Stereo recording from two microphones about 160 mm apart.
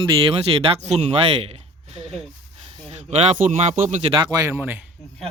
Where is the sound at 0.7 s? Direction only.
45° right (ahead or behind).